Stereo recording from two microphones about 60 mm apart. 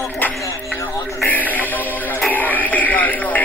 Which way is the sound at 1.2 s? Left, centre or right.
Left.